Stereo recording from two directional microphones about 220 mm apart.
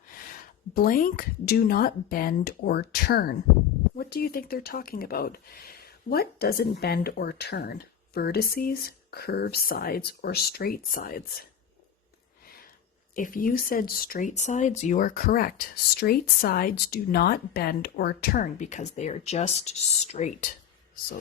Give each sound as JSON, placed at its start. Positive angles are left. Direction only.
{"t": 0.7, "sound": "speech", "side_deg": 40}
{"t": 13.1, "sound": "speech", "side_deg": 40}